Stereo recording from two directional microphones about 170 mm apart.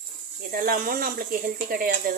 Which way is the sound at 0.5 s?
60° right (ahead or behind).